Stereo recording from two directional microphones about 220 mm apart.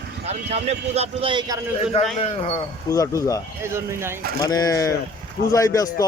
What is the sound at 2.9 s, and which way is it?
Speech, 15° left (ahead or behind).